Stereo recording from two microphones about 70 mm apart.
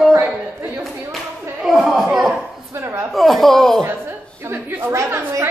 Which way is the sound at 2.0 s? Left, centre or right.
Centre.